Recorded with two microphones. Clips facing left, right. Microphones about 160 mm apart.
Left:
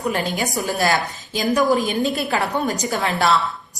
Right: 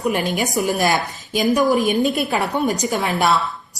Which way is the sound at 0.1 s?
20° right (ahead or behind).